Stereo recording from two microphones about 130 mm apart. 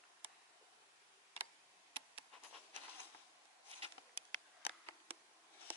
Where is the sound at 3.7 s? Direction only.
50° right (ahead or behind).